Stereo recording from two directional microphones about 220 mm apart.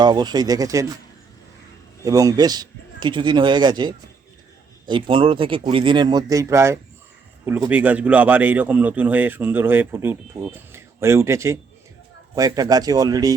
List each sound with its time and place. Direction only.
0.0 s a man's voice: 20° right (ahead or behind)
2.0 s a man's voice: 15° right (ahead or behind)